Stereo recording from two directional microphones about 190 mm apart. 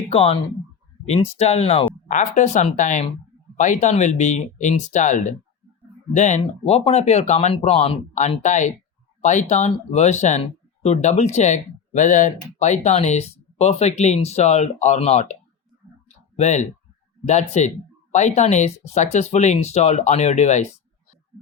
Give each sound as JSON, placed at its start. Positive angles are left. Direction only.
{"t": 0.1, "sound": "speech", "side_deg": 30}